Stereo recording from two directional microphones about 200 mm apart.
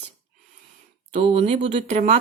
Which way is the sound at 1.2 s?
30° right (ahead or behind).